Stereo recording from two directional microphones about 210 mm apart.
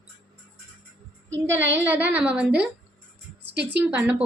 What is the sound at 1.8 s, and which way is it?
A woman's voice, 10° right (ahead or behind).